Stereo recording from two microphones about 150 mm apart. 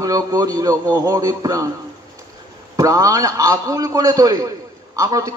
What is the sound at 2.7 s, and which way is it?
A man's voice, 20° right (ahead or behind).